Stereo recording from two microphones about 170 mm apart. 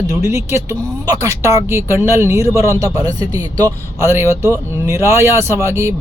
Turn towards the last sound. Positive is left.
turn(degrees=-15)  # may be behind; listen again after turning